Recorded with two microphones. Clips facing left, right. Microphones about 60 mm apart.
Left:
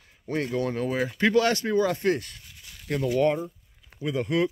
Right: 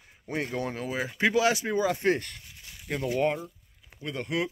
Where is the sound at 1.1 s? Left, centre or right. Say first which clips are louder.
Left 1 dB; centre.